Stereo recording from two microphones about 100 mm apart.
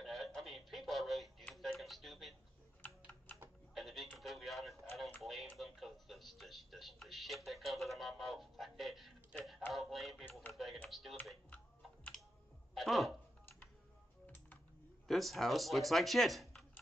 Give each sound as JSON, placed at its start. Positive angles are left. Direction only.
{"t": 0.0, "sound": "a sound", "side_deg": 0}
{"t": 3.7, "sound": "music", "side_deg": 0}
{"t": 5.2, "sound": "television", "side_deg": 0}
{"t": 9.3, "sound": "a sound", "side_deg": 5}
{"t": 10.5, "sound": "typing", "side_deg": 0}
{"t": 10.9, "sound": "computer keyboard", "side_deg": 0}
{"t": 11.5, "sound": "typing", "side_deg": 15}
{"t": 12.7, "sound": "a sound", "side_deg": 0}
{"t": 14.2, "sound": "computer keyboard", "side_deg": 15}
{"t": 15.0, "sound": "speech", "side_deg": 0}